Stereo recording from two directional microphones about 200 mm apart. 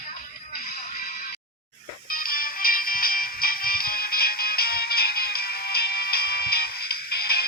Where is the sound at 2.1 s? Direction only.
45° left (ahead or behind).